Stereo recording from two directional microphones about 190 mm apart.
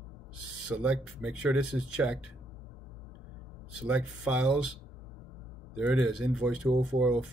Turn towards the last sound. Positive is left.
turn(degrees=-5)  # may be behind; listen again after turning